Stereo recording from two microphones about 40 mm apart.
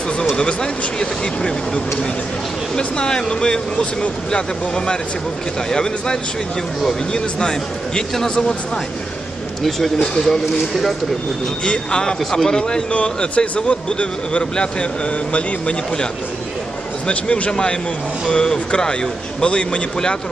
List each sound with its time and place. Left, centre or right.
0.4 s speech: left
2.8 s speech: left
9.6 s a man's voice: centre
11.6 s speech: left
12.9 s speech: left
17.1 s a man's voice: left
17.5 s speech: centre